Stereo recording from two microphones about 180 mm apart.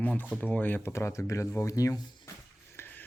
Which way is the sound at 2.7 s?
10° left (ahead or behind).